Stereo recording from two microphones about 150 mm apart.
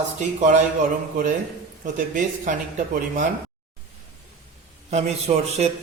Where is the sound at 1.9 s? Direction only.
60° right (ahead or behind).